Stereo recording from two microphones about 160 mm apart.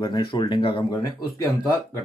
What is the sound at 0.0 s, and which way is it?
Speech, 25° left (ahead or behind).